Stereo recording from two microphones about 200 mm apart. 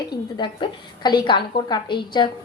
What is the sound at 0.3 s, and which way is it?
A woman's voice, 25° left (ahead or behind).